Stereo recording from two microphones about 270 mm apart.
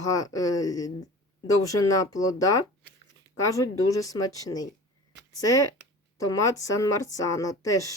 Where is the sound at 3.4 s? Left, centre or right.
Centre.